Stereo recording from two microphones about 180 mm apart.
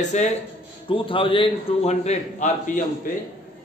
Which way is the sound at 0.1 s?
40° left (ahead or behind).